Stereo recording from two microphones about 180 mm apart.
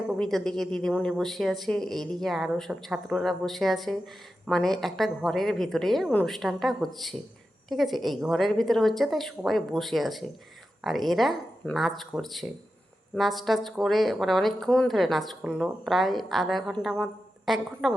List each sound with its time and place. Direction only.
0.1 s speech: centre (ahead or behind)